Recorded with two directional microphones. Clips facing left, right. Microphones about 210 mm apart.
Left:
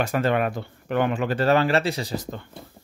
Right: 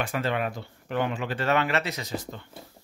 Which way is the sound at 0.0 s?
45° left (ahead or behind).